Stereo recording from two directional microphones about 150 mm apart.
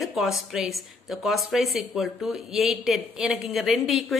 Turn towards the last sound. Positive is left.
turn(degrees=0)  # may be behind; listen again after turning